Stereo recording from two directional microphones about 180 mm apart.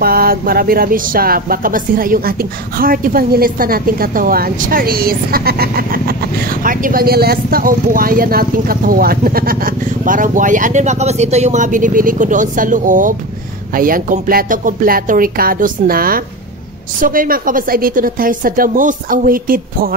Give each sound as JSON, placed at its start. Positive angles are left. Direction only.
{"t": 0.0, "sound": "a woman's voice", "side_deg": -55}